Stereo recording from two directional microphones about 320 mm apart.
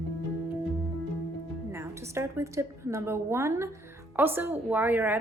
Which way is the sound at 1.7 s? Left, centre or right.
Centre.